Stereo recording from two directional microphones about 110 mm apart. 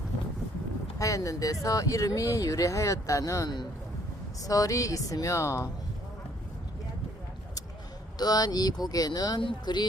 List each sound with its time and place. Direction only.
0.9 s speech: 30° left (ahead or behind)
8.2 s speech: 35° left (ahead or behind)